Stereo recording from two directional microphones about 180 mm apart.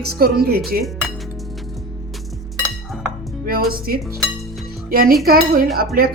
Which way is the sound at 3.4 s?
55° right (ahead or behind).